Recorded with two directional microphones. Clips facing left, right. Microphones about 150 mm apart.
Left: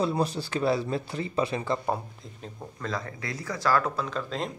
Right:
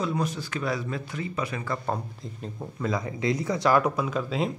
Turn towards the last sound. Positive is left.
turn(degrees=-5)  # may be behind; listen again after turning